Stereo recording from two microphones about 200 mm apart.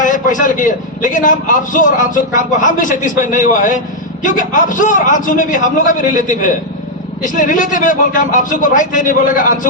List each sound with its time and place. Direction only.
0.0 s a man's voice: 40° left (ahead or behind)